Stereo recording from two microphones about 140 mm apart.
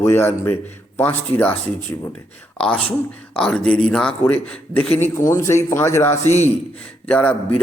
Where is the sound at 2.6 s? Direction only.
5° left (ahead or behind).